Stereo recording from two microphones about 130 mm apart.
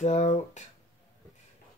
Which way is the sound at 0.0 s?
60° left (ahead or behind).